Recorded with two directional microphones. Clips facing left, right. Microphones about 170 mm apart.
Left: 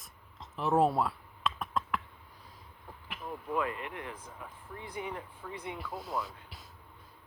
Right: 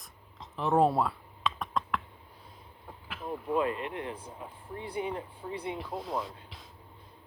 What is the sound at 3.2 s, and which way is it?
Speech, 25° right (ahead or behind).